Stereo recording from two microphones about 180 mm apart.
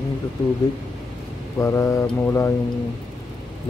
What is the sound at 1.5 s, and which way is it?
Speech, 15° left (ahead or behind).